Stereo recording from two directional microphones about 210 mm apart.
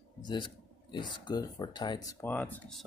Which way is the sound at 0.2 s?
20° left (ahead or behind).